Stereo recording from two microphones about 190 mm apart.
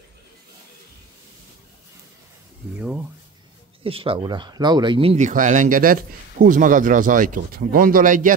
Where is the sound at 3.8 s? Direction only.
30° right (ahead or behind).